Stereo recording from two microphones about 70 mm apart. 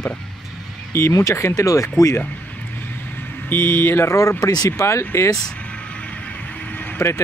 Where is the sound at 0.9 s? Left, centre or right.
Left.